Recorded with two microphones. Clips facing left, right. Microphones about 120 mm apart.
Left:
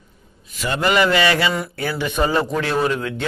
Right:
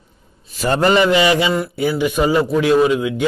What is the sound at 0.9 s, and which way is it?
Mantra, 20° right (ahead or behind).